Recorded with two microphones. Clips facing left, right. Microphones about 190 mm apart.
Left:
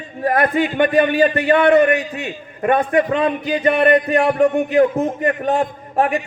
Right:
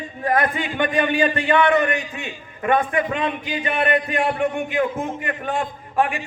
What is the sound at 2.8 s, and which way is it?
Speech, 35° left (ahead or behind).